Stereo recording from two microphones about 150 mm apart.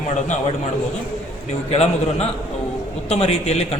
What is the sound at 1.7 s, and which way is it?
A man's voice, 45° left (ahead or behind).